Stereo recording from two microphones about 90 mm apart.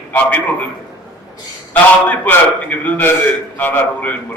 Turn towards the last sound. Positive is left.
turn(degrees=20)  # may be behind; listen again after turning